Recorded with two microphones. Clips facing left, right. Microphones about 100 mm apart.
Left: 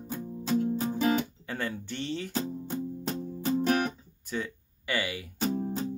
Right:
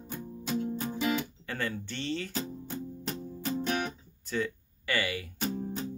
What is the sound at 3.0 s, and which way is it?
Music, 35° left (ahead or behind).